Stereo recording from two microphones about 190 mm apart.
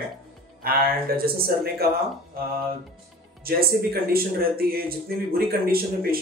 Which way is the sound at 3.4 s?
50° right (ahead or behind).